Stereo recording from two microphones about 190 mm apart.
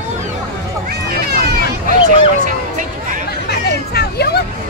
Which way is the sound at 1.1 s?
55° right (ahead or behind).